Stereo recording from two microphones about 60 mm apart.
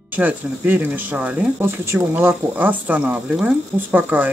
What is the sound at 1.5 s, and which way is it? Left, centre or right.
Speech, right.